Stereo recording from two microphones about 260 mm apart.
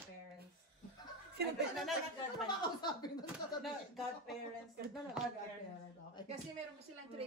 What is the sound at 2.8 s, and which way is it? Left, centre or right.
Speech, centre.